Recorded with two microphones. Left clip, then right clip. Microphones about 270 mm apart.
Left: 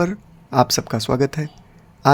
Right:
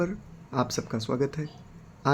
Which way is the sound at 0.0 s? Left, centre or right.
Left.